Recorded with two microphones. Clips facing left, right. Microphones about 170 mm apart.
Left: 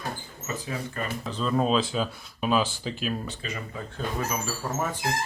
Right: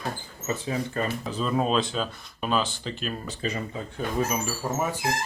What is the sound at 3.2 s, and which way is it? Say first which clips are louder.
Speech: right 5 dB; 35° right (ahead or behind).